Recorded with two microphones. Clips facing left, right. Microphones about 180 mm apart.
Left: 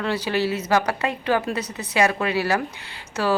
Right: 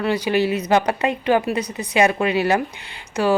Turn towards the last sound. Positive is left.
turn(degrees=-15)  # may be behind; listen again after turning